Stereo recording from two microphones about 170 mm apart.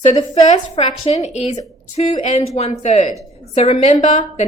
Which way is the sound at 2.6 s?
40° left (ahead or behind).